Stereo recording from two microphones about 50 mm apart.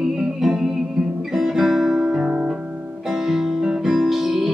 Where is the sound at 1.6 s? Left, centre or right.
Centre.